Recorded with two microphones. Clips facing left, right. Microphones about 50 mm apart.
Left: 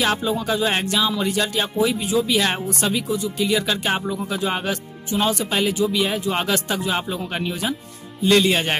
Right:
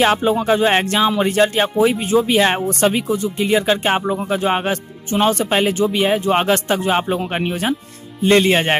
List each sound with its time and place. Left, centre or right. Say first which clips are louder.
0.0 s speech: right 6 dB; right
2.3 s speech: right 5 dB; right